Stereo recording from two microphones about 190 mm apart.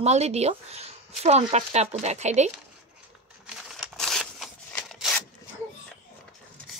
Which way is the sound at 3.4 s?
Centre (ahead or behind).